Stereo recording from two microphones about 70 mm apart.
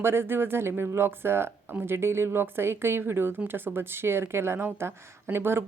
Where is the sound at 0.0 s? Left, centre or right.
Right.